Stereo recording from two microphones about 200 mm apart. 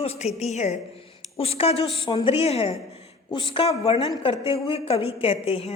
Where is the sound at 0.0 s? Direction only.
30° left (ahead or behind).